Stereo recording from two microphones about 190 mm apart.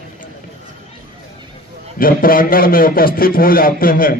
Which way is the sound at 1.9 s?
50° left (ahead or behind).